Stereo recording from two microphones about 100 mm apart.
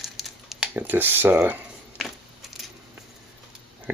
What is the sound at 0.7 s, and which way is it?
Speech, 20° right (ahead or behind).